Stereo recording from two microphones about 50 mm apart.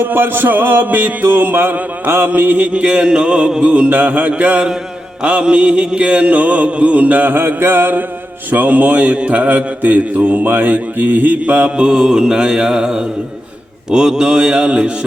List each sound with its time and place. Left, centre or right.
0.0 s music: right
2.7 s mantra: centre